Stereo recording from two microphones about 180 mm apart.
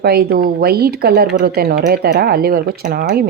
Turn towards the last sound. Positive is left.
turn(degrees=-55)  # may be behind; listen again after turning